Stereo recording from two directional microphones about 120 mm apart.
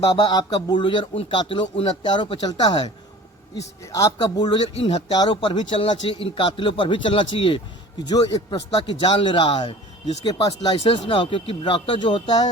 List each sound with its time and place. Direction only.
0.2 s speech: 40° left (ahead or behind)
3.9 s speech: 30° left (ahead or behind)
8.0 s speech: 35° left (ahead or behind)
10.8 s speech: 50° left (ahead or behind)